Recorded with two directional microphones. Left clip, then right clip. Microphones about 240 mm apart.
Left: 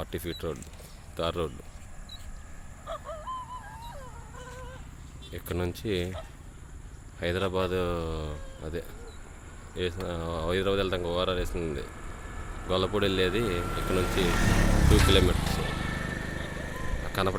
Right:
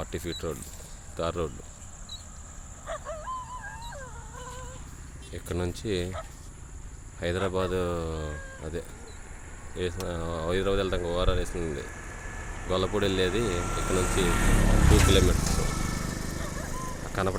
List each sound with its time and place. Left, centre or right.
0.0 s speech: centre
2.8 s a sound: left
5.3 s speech: centre
7.2 s speech: centre
11.9 s a sound: left
12.6 s speech: centre
13.4 s speech: left
14.3 s speech: left
14.8 s vehicle: right
15.4 s vehicle: right